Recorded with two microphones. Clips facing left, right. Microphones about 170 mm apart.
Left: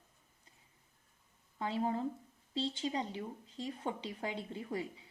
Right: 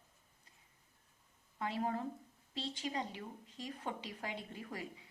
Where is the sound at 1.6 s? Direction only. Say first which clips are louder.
Left 3 dB; 25° left (ahead or behind).